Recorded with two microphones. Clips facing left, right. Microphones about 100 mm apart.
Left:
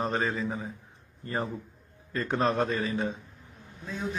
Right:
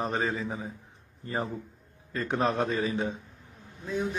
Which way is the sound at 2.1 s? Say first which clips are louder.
Left 1 dB; 15° right (ahead or behind).